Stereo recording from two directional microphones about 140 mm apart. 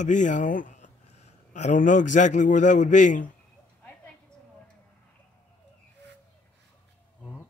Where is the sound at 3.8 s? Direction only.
5° left (ahead or behind).